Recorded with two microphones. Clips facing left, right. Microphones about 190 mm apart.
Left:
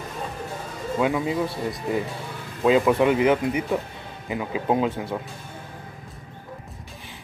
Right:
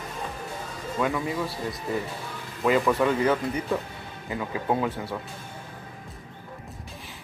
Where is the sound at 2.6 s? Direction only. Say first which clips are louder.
Left 4 dB; 20° left (ahead or behind).